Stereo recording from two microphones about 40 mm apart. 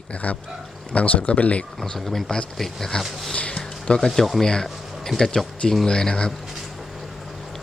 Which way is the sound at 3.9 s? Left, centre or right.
Centre.